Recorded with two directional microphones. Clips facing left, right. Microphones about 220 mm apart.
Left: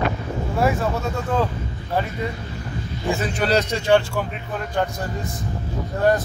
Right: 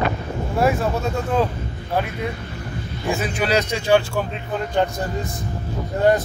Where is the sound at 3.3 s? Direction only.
5° right (ahead or behind).